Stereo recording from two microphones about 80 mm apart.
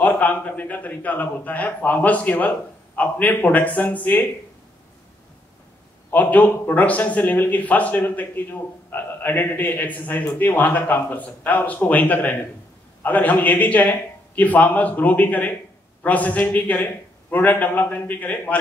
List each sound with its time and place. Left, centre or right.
0.0 s a man's voice: left
6.0 s a man's voice: left